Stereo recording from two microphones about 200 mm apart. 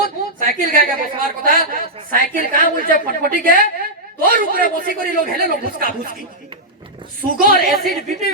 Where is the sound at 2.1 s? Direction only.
45° right (ahead or behind).